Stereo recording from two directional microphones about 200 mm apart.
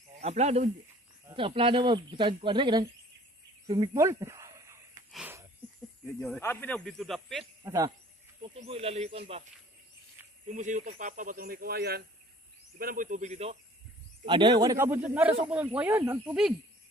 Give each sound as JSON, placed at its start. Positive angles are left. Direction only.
{"t": 0.2, "sound": "speech", "side_deg": -35}
{"t": 3.6, "sound": "a sound", "side_deg": -20}
{"t": 6.1, "sound": "speech", "side_deg": 0}
{"t": 7.6, "sound": "speech", "side_deg": -15}
{"t": 8.4, "sound": "speech", "side_deg": -30}
{"t": 10.5, "sound": "speech", "side_deg": -40}